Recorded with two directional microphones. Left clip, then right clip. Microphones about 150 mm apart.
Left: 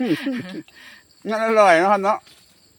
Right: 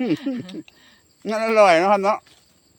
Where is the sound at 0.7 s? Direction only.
5° left (ahead or behind).